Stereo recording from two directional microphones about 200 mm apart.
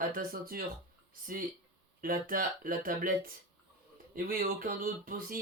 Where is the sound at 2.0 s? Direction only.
45° right (ahead or behind).